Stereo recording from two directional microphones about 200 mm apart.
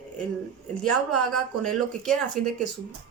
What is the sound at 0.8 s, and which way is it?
A woman's voice, 5° left (ahead or behind).